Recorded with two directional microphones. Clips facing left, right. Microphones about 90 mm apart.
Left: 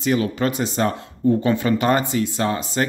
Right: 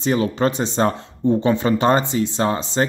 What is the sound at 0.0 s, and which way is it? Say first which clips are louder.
Speech: right 2 dB; 30° right (ahead or behind).